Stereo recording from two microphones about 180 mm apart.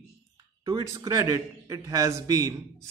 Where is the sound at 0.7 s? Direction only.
20° right (ahead or behind).